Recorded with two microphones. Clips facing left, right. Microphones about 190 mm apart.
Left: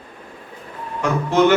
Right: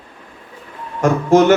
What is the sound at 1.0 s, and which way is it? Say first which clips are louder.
Speech: right 5 dB; 45° right (ahead or behind).